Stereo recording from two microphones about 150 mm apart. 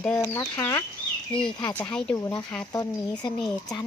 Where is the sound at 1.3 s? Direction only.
5° left (ahead or behind).